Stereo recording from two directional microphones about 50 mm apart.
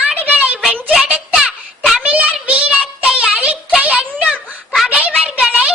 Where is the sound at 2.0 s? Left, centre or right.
Right.